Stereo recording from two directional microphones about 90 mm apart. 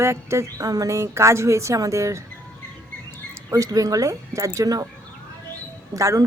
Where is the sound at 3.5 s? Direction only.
40° right (ahead or behind).